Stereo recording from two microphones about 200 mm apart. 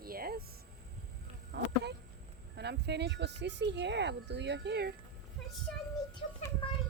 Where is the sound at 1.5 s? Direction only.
60° right (ahead or behind).